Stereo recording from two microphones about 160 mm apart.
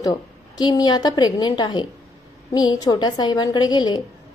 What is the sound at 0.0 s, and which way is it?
A woman's voice, 25° left (ahead or behind).